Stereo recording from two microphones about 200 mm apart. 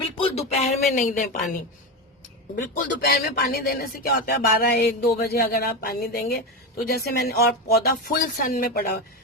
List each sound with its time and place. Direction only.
0.2 s speech: 30° left (ahead or behind)
2.6 s speech: 40° left (ahead or behind)